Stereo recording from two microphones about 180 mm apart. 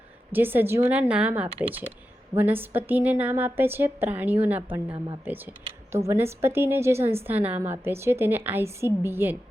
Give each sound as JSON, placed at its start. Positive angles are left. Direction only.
{"t": 0.3, "sound": "a woman's voice", "side_deg": -10}